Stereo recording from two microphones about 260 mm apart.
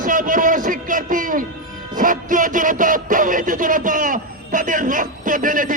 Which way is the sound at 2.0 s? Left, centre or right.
Right.